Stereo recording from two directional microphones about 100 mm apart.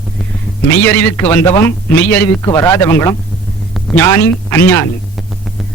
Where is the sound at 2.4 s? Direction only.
30° left (ahead or behind).